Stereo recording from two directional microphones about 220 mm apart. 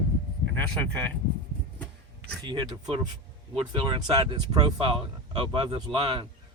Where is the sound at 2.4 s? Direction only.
20° right (ahead or behind).